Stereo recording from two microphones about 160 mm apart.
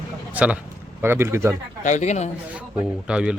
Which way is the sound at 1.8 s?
50° left (ahead or behind).